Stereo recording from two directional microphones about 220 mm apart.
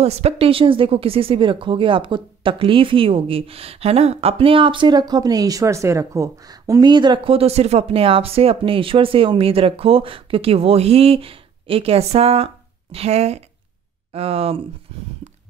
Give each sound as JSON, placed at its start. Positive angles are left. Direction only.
{"t": 0.0, "sound": "a woman's voice", "side_deg": -30}